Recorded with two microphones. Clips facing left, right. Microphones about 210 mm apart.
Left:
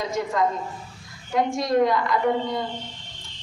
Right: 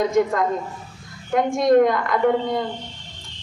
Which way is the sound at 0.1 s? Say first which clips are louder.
Right 5 dB; 55° right (ahead or behind).